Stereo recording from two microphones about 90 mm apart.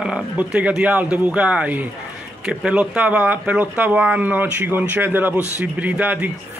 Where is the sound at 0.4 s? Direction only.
15° right (ahead or behind).